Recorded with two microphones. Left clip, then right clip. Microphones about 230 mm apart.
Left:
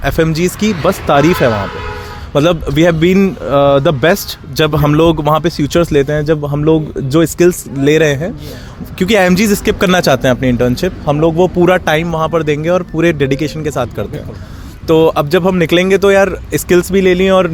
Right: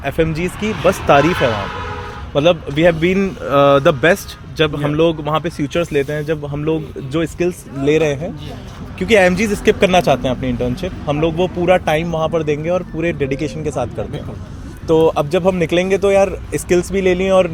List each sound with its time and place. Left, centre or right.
0.0 s speech: left
0.9 s speech: left
2.3 s speech: left
3.4 s speech: left
4.0 s speech: left
11.6 s speech: left